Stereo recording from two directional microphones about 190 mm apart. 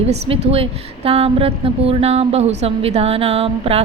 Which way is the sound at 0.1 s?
30° right (ahead or behind).